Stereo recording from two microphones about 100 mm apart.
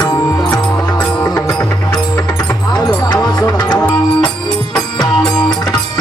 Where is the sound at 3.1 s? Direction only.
45° left (ahead or behind).